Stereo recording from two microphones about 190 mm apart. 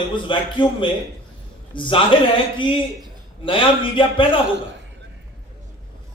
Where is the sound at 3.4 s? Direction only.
25° left (ahead or behind).